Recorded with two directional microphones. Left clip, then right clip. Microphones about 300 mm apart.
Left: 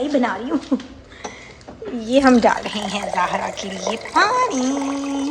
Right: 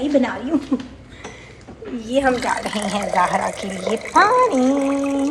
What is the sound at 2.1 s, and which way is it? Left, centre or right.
Speech, left.